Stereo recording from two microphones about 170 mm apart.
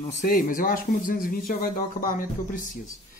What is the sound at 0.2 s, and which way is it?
Speech, 50° left (ahead or behind).